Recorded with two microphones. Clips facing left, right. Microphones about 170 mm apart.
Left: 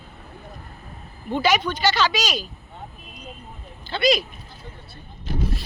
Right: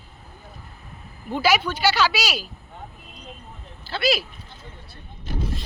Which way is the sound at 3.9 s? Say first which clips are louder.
Left 3 dB; 5° right (ahead or behind).